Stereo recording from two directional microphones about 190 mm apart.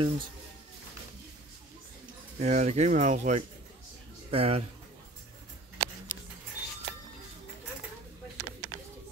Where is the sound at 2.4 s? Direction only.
35° right (ahead or behind).